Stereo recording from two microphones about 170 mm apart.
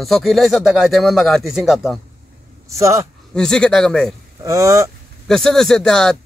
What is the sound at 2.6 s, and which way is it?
Speech, 20° right (ahead or behind).